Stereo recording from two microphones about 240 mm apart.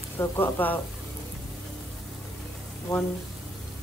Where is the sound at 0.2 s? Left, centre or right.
Centre.